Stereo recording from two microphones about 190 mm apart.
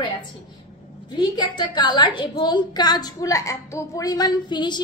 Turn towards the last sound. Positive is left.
turn(degrees=25)  # may be behind; listen again after turning